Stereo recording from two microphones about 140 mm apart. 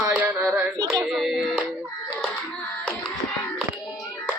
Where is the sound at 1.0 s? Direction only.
Centre (ahead or behind).